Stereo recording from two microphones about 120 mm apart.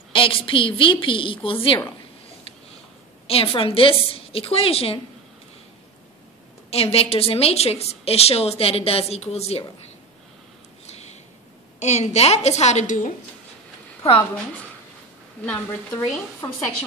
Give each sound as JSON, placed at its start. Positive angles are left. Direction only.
{"t": 0.1, "sound": "a woman's voice", "side_deg": 45}
{"t": 3.3, "sound": "a woman's voice", "side_deg": 55}
{"t": 6.7, "sound": "a woman's voice", "side_deg": 55}
{"t": 10.9, "sound": "a sound", "side_deg": 65}
{"t": 11.8, "sound": "a woman's voice", "side_deg": 70}
{"t": 15.4, "sound": "a woman's voice", "side_deg": 20}